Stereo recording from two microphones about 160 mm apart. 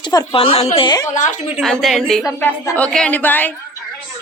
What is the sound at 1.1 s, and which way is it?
Speech, 50° left (ahead or behind).